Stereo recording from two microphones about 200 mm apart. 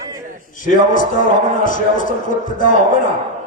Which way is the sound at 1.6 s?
40° left (ahead or behind).